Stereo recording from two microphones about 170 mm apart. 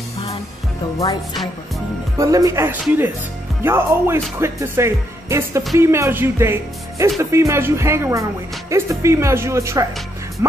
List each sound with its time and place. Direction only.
0.9 s music: 20° left (ahead or behind)
2.1 s speech: 20° right (ahead or behind)